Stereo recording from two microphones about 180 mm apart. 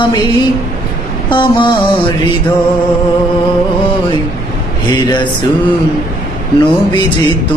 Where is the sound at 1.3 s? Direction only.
25° left (ahead or behind).